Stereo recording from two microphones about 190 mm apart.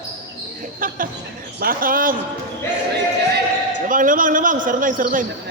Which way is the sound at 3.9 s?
45° right (ahead or behind).